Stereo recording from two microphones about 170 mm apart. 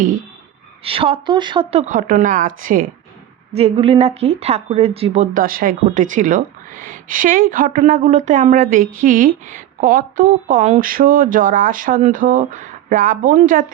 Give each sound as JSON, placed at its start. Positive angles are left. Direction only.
{"t": 0.9, "sound": "a woman's voice", "side_deg": -35}
{"t": 1.8, "sound": "speech", "side_deg": -50}
{"t": 3.5, "sound": "speech", "side_deg": -35}